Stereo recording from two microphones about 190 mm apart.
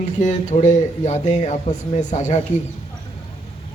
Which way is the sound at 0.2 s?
40° left (ahead or behind).